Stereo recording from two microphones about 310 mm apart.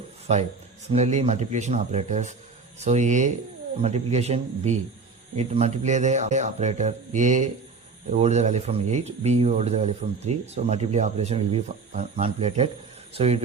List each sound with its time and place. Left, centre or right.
0.9 s speech: right